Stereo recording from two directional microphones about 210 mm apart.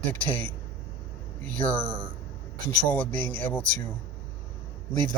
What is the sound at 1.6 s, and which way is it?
Speech, 5° left (ahead or behind).